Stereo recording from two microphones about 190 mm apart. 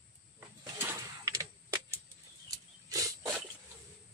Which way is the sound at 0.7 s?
15° right (ahead or behind).